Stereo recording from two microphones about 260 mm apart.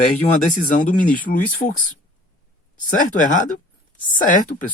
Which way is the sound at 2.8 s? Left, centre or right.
Left.